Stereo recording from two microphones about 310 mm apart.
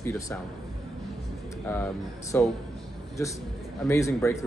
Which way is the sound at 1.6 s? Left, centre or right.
Centre.